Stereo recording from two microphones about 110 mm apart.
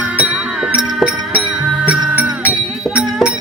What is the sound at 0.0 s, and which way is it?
Music, 10° right (ahead or behind).